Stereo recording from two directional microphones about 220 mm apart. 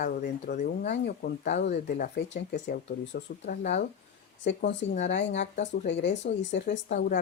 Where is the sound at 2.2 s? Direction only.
50° left (ahead or behind).